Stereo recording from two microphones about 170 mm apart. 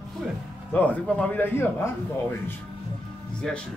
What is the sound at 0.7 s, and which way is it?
Speech, 10° left (ahead or behind).